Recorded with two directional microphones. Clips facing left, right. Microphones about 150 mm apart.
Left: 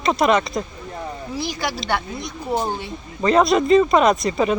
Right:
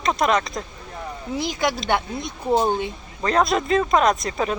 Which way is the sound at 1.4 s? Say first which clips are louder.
Right 3 dB; 20° right (ahead or behind).